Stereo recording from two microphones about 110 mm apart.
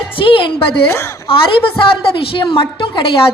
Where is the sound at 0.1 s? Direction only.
50° left (ahead or behind).